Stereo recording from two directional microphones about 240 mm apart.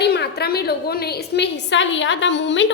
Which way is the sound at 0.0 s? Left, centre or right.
Left.